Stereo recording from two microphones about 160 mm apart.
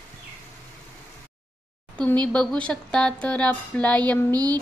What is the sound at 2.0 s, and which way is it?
Speech, 5° left (ahead or behind).